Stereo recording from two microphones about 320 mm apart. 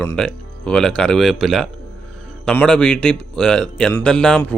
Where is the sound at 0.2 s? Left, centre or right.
Centre.